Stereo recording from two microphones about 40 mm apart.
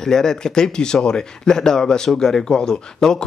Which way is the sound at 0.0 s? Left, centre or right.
Centre.